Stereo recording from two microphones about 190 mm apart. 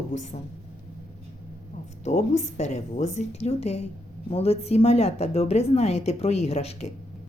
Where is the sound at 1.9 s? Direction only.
35° left (ahead or behind).